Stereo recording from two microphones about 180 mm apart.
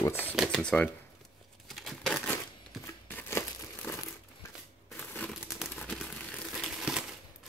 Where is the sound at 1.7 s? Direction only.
Centre (ahead or behind).